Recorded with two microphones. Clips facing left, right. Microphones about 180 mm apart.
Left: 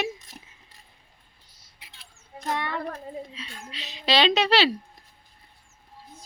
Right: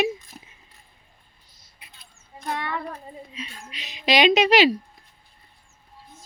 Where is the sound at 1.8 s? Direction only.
85° left.